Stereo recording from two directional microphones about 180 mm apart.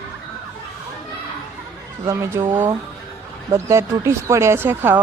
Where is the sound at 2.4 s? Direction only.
15° right (ahead or behind).